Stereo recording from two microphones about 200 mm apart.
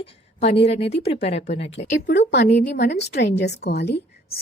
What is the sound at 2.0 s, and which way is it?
A woman's voice, 60° left (ahead or behind).